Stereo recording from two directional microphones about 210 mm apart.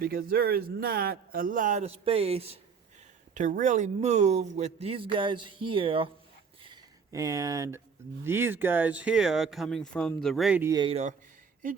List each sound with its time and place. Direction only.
0.0 s speech: 45° right (ahead or behind); by 6.1 s 25° right (ahead or behind)
6.6 s a sound: 20° right (ahead or behind)
8.2 s speech: 10° right (ahead or behind)
10.7 s speech: 20° right (ahead or behind)